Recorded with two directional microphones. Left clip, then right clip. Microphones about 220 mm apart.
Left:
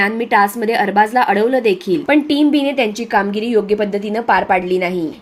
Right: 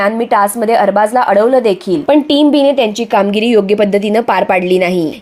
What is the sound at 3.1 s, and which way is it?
A woman's voice, 35° right (ahead or behind).